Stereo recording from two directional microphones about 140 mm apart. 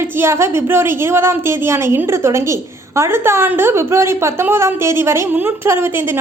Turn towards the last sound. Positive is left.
turn(degrees=-15)  # may be behind; listen again after turning